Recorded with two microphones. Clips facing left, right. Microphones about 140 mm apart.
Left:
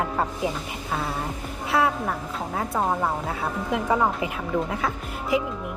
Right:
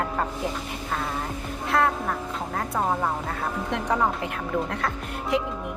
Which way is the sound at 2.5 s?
5° left (ahead or behind).